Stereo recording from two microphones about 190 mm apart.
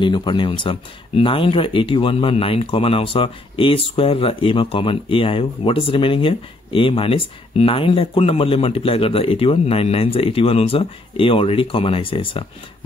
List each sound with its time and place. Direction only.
0.0 s speech: 25° left (ahead or behind)